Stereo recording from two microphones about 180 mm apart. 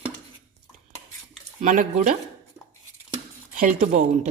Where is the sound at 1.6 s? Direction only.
45° right (ahead or behind).